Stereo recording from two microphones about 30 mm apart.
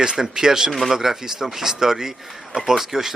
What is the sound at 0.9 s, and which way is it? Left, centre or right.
Speech, centre.